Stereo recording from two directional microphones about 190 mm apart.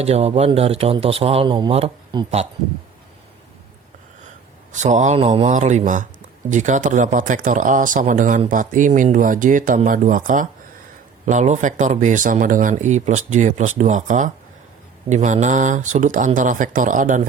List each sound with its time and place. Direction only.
0.0 s speech: 35° right (ahead or behind)
4.7 s speech: 40° right (ahead or behind)